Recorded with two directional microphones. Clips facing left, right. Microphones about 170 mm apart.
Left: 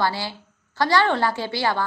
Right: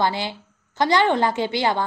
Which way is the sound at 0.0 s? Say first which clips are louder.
Right 2 dB; 20° right (ahead or behind).